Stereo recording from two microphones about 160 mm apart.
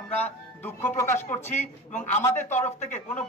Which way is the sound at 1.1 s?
45° left (ahead or behind).